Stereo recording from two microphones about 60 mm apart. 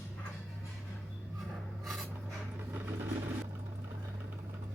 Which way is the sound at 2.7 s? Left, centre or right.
Right.